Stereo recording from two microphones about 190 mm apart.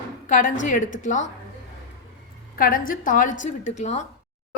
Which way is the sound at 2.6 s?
45° left (ahead or behind).